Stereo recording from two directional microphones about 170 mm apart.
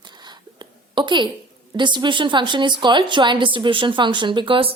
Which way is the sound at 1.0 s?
30° right (ahead or behind).